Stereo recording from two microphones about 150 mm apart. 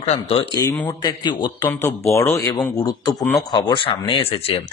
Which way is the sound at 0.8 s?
30° left (ahead or behind).